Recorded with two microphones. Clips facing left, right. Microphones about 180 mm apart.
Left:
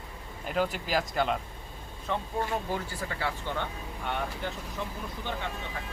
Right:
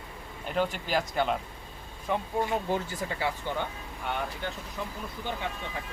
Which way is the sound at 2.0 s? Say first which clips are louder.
Right 2 dB; 15° right (ahead or behind).